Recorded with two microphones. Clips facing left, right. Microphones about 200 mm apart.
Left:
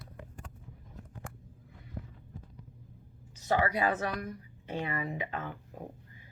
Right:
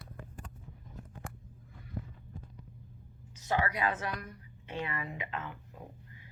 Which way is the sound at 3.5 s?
35° left (ahead or behind).